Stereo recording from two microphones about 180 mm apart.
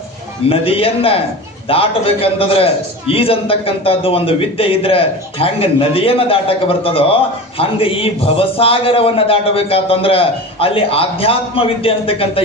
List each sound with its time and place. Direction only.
0.5 s a man's voice: 30° left (ahead or behind)